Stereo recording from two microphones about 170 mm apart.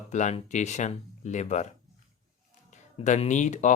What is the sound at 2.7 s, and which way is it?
Speech, 45° left (ahead or behind).